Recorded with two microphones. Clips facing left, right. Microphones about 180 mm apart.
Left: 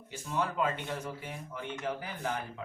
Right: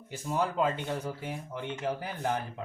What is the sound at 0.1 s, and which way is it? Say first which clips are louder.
Speech: right 3 dB; 40° right (ahead or behind).